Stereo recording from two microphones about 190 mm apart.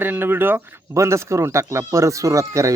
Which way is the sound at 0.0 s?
10° right (ahead or behind).